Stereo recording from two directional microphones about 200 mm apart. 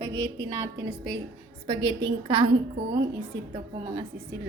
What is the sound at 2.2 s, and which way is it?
Speech, 25° right (ahead or behind).